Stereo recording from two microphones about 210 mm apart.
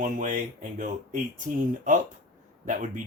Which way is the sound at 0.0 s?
35° right (ahead or behind).